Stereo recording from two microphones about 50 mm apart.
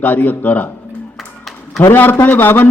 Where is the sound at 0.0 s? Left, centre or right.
Left.